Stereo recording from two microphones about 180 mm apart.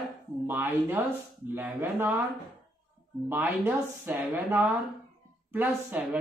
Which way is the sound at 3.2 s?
10° right (ahead or behind).